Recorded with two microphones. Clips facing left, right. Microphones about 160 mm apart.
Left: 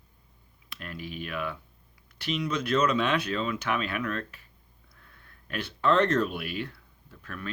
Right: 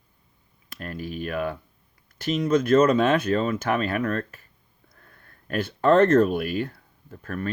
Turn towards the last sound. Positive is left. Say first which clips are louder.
# right 9 dB
turn(degrees=-45)  # may be behind; listen again after turning